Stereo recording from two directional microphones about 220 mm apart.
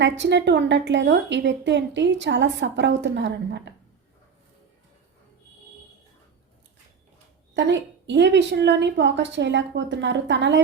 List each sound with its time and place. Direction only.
0.0 s a woman's voice: 55° right (ahead or behind)
7.5 s a woman's voice: 55° right (ahead or behind)